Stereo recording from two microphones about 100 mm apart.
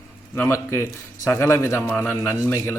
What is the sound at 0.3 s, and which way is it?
Speech, 25° left (ahead or behind).